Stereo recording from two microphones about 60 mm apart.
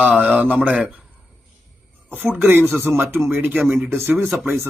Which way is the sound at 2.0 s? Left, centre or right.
Right.